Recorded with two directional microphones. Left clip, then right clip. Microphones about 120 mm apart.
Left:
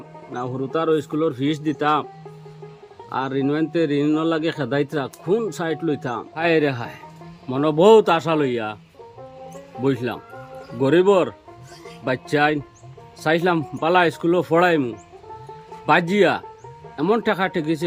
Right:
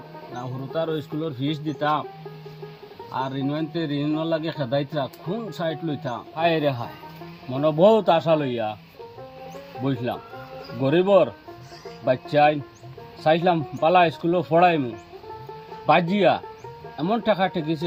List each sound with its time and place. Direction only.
0.7 s a man's voice: 25° left (ahead or behind)
3.1 s a man's voice: 25° left (ahead or behind)
9.8 s speech: 10° left (ahead or behind)
15.9 s speech: 10° left (ahead or behind)